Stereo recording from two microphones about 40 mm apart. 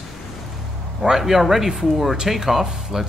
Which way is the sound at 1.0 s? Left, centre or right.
Centre.